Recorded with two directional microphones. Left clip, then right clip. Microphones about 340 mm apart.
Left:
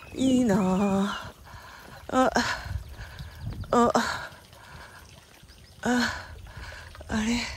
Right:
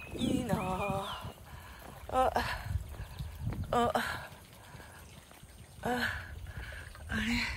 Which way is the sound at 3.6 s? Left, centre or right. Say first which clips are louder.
Left 8 dB; centre.